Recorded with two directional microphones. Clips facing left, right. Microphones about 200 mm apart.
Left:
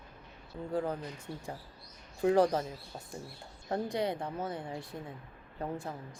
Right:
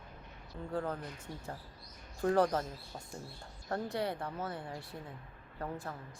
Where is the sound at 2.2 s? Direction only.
10° left (ahead or behind).